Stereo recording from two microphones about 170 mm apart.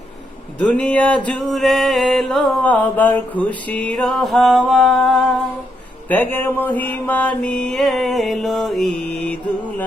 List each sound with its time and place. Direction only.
0.6 s music: 5° left (ahead or behind)
6.1 s music: 10° left (ahead or behind)
9.0 s mantra: 10° left (ahead or behind)